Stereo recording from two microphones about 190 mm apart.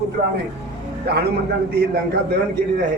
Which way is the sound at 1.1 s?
55° right (ahead or behind).